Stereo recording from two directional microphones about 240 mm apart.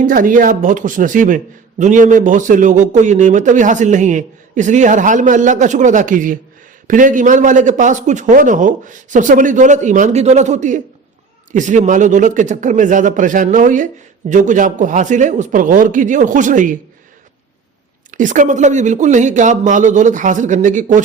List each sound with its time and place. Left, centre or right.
0.0 s speech: right
18.1 s speech: right